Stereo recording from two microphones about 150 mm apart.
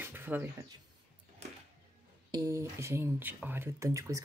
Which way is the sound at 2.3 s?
25° right (ahead or behind).